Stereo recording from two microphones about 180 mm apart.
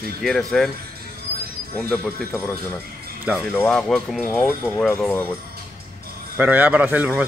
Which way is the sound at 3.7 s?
5° left (ahead or behind).